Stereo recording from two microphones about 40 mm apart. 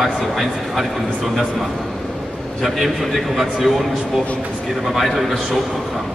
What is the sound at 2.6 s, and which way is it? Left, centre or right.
A man's voice, centre.